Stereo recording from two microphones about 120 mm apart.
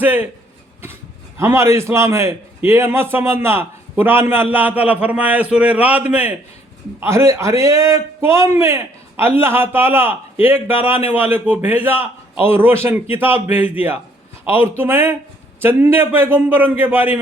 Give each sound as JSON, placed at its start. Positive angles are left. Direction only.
{"t": 0.0, "sound": "a man's voice", "side_deg": -15}
{"t": 1.4, "sound": "a man's voice", "side_deg": -25}
{"t": 7.0, "sound": "a man's voice", "side_deg": -20}